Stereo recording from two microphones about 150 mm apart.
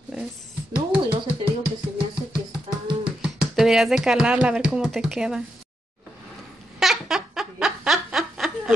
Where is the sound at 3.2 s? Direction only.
5° right (ahead or behind).